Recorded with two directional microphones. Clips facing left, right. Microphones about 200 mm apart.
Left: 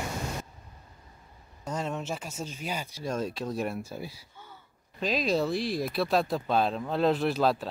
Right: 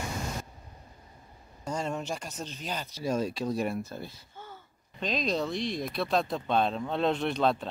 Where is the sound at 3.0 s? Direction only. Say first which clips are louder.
Right 4 dB; centre (ahead or behind).